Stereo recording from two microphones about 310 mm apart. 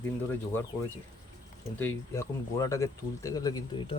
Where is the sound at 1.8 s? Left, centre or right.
Centre.